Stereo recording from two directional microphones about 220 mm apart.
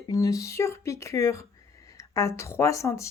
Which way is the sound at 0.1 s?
15° left (ahead or behind).